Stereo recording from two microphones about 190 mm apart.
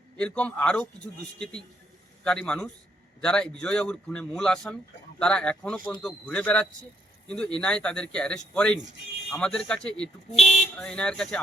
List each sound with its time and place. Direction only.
0.2 s speech: 5° left (ahead or behind)
2.2 s speech: 5° left (ahead or behind)
10.3 s speech: 35° left (ahead or behind)
10.6 s speech: 5° left (ahead or behind)